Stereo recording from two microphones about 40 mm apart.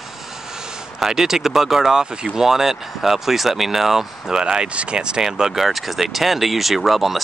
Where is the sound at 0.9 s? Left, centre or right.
Centre.